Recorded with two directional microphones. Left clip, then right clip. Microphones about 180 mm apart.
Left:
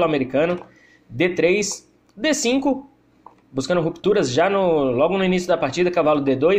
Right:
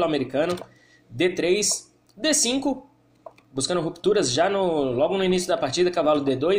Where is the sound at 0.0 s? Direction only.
15° left (ahead or behind).